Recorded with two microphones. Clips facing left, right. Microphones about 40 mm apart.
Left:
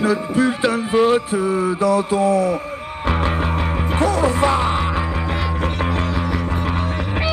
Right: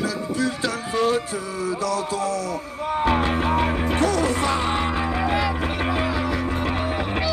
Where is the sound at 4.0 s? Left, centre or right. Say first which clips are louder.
Left 6 dB; left.